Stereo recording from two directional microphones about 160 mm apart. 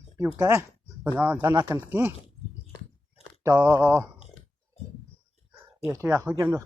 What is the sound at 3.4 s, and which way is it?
Speech, 15° right (ahead or behind).